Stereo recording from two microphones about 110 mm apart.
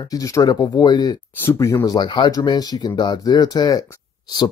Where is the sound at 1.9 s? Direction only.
40° left (ahead or behind).